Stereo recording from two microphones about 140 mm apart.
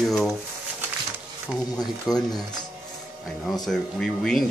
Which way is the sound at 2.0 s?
30° left (ahead or behind).